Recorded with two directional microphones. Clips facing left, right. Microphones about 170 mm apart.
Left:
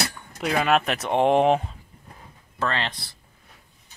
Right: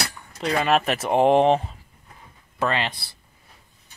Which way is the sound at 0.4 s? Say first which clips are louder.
Even; 5° left (ahead or behind).